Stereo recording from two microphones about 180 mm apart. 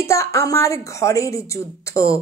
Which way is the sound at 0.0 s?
15° left (ahead or behind).